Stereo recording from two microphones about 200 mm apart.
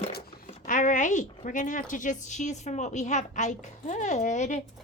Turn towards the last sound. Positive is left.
turn(degrees=35)  # may be behind; listen again after turning